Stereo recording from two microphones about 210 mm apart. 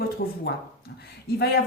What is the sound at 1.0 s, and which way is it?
Speech, 50° left (ahead or behind).